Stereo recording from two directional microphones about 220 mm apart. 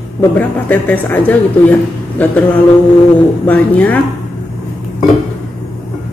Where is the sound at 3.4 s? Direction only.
5° left (ahead or behind).